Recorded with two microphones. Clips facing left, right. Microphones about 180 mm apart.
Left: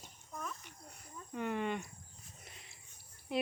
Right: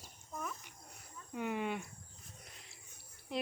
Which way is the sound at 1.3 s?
10° right (ahead or behind).